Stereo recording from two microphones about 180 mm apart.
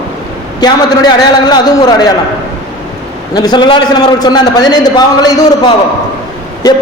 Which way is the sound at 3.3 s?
25° left (ahead or behind).